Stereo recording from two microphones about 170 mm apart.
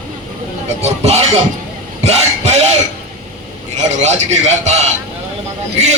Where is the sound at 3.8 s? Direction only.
40° right (ahead or behind).